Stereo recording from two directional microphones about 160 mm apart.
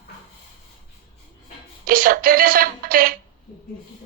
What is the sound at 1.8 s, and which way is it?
Music, 65° right (ahead or behind).